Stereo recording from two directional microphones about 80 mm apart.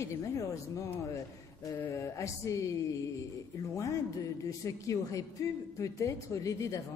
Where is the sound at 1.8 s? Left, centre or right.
Left.